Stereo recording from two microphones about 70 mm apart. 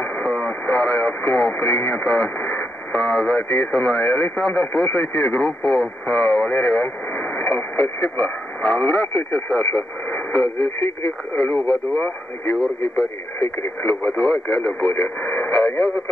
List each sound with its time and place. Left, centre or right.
0.0 s speech: centre
14.0 s speech: centre